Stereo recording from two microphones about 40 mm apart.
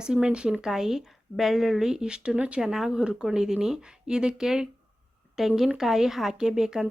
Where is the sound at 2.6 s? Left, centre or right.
Centre.